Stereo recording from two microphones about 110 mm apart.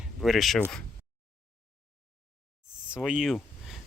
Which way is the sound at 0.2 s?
Centre (ahead or behind).